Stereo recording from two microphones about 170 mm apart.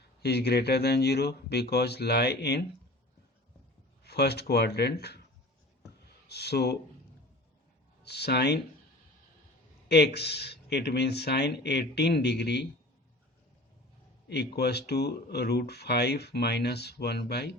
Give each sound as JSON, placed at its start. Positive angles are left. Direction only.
{"t": 0.2, "sound": "speech", "side_deg": 70}
{"t": 4.0, "sound": "speech", "side_deg": 70}
{"t": 6.2, "sound": "speech", "side_deg": 75}
{"t": 8.0, "sound": "speech", "side_deg": 75}
{"t": 9.9, "sound": "speech", "side_deg": 75}
{"t": 14.3, "sound": "speech", "side_deg": 75}